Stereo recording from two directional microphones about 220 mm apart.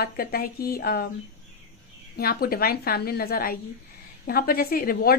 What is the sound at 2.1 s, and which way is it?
A woman's voice, 45° left (ahead or behind).